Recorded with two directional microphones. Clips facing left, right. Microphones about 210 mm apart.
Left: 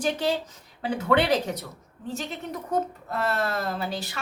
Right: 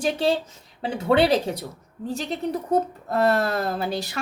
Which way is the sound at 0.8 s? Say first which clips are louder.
Right 3 dB; 30° right (ahead or behind).